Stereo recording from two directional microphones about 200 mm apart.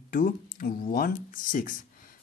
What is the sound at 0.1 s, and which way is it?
Speech, 45° left (ahead or behind).